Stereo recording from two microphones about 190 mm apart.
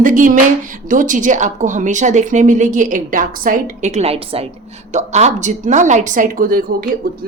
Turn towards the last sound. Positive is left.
turn(degrees=-50)  # may be behind; listen again after turning